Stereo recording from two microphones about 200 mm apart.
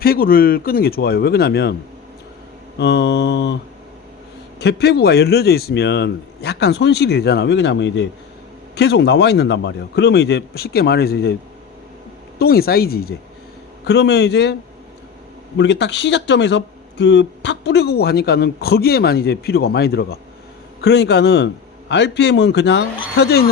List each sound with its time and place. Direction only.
0.0 s speech: 45° left (ahead or behind)
2.7 s speech: 60° left (ahead or behind)
4.6 s speech: 55° left (ahead or behind)
12.4 s speech: 50° left (ahead or behind)
15.5 s speech: 60° left (ahead or behind)